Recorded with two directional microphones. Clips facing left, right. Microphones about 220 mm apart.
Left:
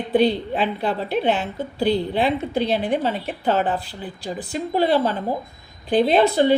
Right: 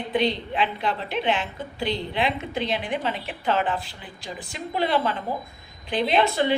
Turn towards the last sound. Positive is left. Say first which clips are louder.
# left 5 dB
turn(degrees=35)  # may be behind; listen again after turning